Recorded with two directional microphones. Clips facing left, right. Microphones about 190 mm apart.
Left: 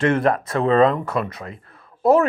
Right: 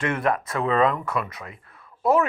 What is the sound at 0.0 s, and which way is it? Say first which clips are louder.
Speech: left 6 dB; 30° left (ahead or behind).